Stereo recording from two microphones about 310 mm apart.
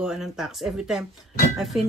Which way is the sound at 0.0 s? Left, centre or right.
Centre.